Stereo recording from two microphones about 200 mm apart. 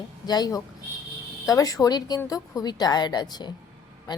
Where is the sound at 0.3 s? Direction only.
20° left (ahead or behind).